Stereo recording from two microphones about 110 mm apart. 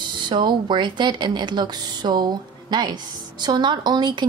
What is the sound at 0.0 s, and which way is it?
Speech, 45° right (ahead or behind).